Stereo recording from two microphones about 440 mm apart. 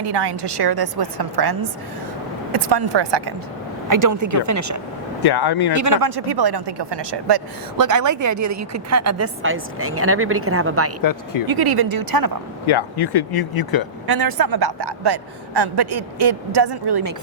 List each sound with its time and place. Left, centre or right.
0.0 s a man's voice: right
3.8 s a woman's voice: right
5.2 s speech: left
5.7 s a man's voice: right
7.8 s a woman's voice: right
11.0 s speech: left
11.4 s speech: right
12.6 s speech: left
14.1 s a man's voice: right